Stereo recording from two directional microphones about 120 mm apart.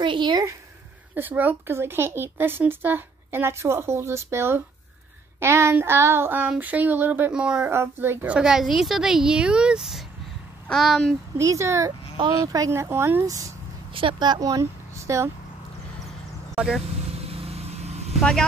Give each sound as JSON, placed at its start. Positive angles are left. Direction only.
{"t": 0.0, "sound": "speech", "side_deg": -40}
{"t": 1.1, "sound": "speech", "side_deg": -15}
{"t": 7.7, "sound": "speech", "side_deg": -20}
{"t": 8.4, "sound": "a woman's voice", "side_deg": -5}
{"t": 11.3, "sound": "speech", "side_deg": -25}
{"t": 13.9, "sound": "speech", "side_deg": -45}
{"t": 16.5, "sound": "speech", "side_deg": -5}
{"t": 17.1, "sound": "vehicle", "side_deg": -55}